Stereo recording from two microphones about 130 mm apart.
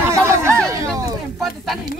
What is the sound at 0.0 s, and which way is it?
Chatter, 20° right (ahead or behind).